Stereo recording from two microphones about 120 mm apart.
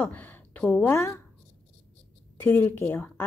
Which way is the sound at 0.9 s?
25° left (ahead or behind).